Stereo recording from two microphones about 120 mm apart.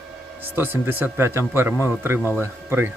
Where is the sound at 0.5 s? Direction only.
15° right (ahead or behind).